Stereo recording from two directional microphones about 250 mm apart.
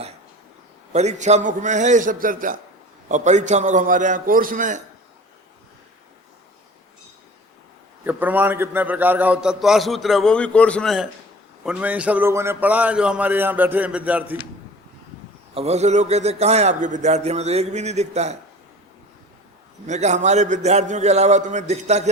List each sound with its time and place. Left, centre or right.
0.9 s a man's voice: right
8.0 s a man's voice: centre
15.5 s a man's voice: right
19.9 s a man's voice: right